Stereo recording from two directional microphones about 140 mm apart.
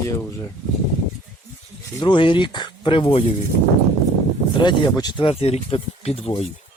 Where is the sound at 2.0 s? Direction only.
35° left (ahead or behind).